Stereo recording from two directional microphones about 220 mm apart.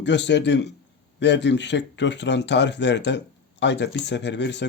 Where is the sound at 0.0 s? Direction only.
55° left (ahead or behind).